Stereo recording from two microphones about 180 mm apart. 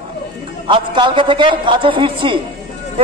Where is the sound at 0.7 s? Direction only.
25° right (ahead or behind).